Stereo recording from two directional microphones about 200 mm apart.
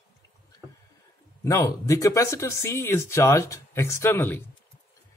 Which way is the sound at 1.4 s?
15° left (ahead or behind).